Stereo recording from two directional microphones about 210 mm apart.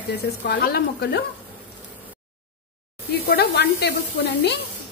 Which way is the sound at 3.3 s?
50° left (ahead or behind).